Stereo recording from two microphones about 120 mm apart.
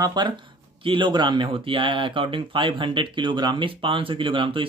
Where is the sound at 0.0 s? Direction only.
35° right (ahead or behind).